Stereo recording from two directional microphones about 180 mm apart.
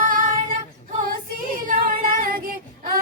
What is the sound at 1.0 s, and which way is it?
Child singing, 50° right (ahead or behind).